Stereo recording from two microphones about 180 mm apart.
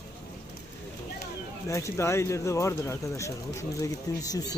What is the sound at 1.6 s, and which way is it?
Speech, 15° left (ahead or behind).